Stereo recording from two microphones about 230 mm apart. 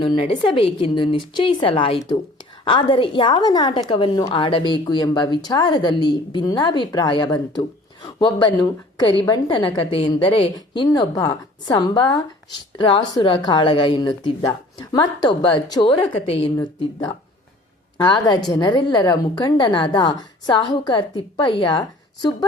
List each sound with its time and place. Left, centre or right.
0.0 s a woman's voice: left